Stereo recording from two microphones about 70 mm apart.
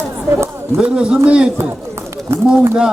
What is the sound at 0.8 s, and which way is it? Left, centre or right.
Speech, centre.